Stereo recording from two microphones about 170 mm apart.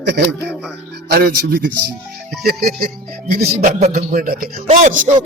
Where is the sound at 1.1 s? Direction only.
65° right (ahead or behind).